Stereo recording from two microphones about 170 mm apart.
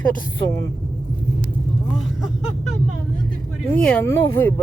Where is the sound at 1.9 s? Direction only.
Centre (ahead or behind).